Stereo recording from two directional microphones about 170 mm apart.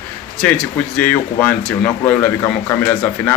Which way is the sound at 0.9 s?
10° left (ahead or behind).